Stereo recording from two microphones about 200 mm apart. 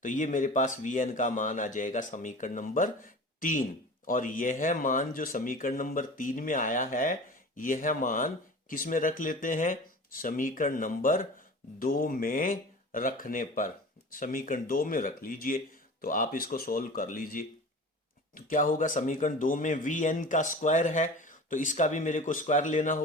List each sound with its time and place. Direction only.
0.0 s speech: 40° left (ahead or behind)